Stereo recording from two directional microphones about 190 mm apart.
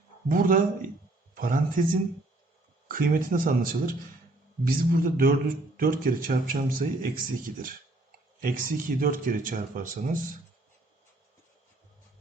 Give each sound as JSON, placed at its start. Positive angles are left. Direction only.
{"t": 0.3, "sound": "speech", "side_deg": -45}
{"t": 2.9, "sound": "speech", "side_deg": -50}